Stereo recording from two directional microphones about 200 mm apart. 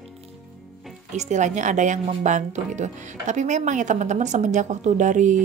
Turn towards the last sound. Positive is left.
turn(degrees=-40)  # may be behind; listen again after turning